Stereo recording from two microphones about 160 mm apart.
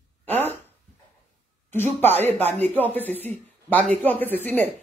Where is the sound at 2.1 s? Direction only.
45° right (ahead or behind).